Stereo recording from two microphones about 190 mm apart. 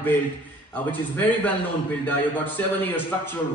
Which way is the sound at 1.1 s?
10° left (ahead or behind).